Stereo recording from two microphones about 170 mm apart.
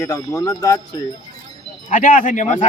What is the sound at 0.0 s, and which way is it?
Speech, 20° left (ahead or behind).